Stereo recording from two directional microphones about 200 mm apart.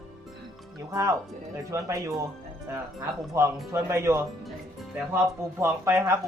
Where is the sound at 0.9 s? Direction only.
15° right (ahead or behind).